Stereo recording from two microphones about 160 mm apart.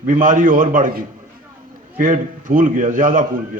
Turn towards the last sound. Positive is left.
turn(degrees=-55)  # may be behind; listen again after turning